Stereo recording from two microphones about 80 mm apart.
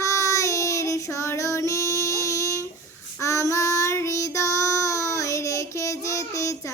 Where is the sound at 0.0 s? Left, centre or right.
Left.